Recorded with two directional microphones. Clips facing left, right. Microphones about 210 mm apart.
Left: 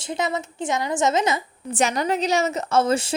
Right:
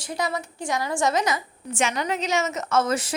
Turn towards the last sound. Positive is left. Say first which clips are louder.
# left 3 dB
turn(degrees=30)  # may be behind; listen again after turning